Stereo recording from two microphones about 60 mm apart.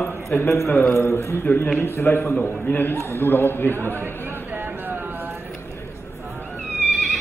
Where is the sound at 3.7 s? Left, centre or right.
Right.